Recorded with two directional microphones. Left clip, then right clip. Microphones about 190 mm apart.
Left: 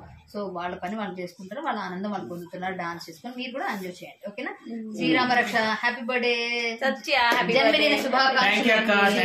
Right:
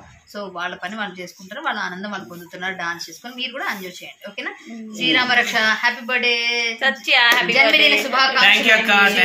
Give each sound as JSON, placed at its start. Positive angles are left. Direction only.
{"t": 0.6, "sound": "a woman's voice", "side_deg": 5}
{"t": 4.9, "sound": "a woman's voice", "side_deg": 0}
{"t": 6.8, "sound": "speech", "side_deg": -20}
{"t": 7.9, "sound": "a woman's voice", "side_deg": -10}
{"t": 8.5, "sound": "speech", "side_deg": 10}